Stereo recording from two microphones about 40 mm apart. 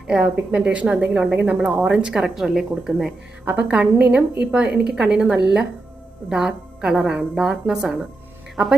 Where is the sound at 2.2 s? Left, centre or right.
Centre.